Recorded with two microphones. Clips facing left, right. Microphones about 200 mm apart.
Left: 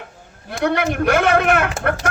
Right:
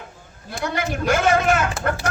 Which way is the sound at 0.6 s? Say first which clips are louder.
Left 6 dB; 60° left (ahead or behind).